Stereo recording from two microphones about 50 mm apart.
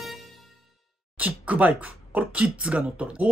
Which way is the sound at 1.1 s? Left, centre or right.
Right.